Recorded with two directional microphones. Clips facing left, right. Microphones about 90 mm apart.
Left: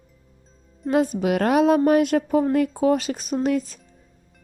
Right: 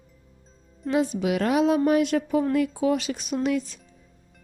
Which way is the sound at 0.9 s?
45° left (ahead or behind).